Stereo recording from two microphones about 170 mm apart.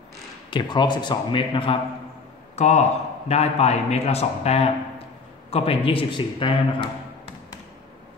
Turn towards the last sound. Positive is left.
turn(degrees=30)  # may be behind; listen again after turning